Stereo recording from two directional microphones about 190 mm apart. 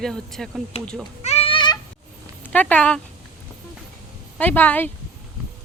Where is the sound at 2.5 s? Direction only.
5° left (ahead or behind).